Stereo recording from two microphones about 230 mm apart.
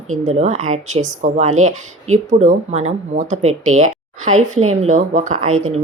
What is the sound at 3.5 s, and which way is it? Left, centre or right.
Speech, right.